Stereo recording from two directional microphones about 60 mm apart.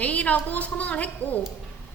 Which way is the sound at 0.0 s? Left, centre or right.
Left.